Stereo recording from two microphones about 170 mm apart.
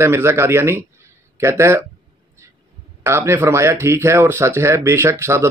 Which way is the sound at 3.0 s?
15° right (ahead or behind).